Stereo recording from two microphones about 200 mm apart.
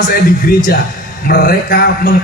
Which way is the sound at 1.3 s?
50° left (ahead or behind).